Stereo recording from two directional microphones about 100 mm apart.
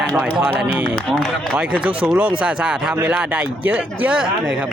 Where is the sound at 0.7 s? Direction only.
5° left (ahead or behind).